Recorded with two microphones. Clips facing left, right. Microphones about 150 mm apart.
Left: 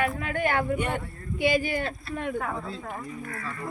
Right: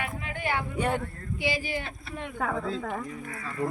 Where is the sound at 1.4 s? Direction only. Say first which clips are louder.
Left 6 dB; 55° left (ahead or behind).